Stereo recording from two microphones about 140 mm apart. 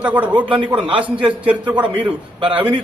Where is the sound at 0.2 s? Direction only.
10° right (ahead or behind).